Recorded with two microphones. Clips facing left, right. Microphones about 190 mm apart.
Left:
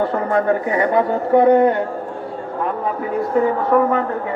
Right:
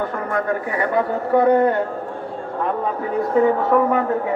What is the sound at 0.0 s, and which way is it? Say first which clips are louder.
Speech: left 5 dB; 30° left (ahead or behind).